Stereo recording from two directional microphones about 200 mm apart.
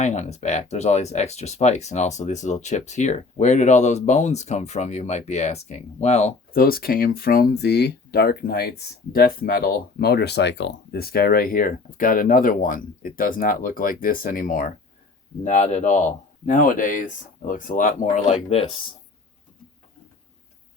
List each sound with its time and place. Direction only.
0.0 s speech: 35° left (ahead or behind)
6.5 s speech: 50° left (ahead or behind)